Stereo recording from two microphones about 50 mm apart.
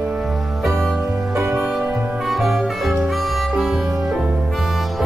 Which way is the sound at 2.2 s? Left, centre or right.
Centre.